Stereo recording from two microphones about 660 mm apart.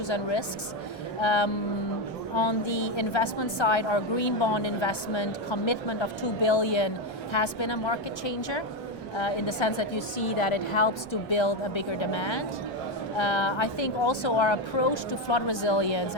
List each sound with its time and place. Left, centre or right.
0.1 s a woman's voice: left